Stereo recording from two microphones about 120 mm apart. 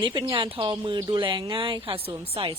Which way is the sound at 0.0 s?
40° right (ahead or behind).